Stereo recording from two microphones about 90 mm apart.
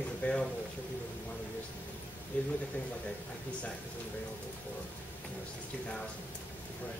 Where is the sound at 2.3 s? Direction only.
15° left (ahead or behind).